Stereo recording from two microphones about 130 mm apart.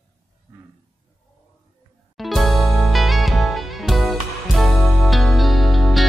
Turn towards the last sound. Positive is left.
turn(degrees=0)  # may be behind; listen again after turning